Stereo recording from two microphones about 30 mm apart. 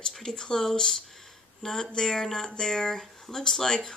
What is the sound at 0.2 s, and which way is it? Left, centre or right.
Speech, centre.